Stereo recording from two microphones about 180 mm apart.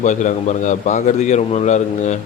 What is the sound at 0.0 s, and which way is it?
A man's voice, 45° left (ahead or behind).